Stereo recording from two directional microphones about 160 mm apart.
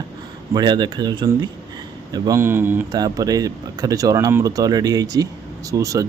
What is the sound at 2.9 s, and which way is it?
Speech, 25° right (ahead or behind).